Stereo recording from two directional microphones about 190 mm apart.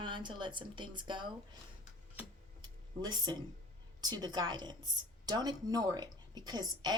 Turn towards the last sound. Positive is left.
turn(degrees=-20)  # may be behind; listen again after turning